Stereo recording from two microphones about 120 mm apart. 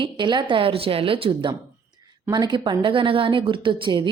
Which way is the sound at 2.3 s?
35° right (ahead or behind).